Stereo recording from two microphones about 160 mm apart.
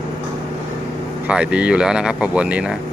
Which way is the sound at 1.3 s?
5° right (ahead or behind).